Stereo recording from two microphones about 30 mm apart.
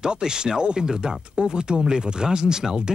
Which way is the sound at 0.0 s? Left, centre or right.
Right.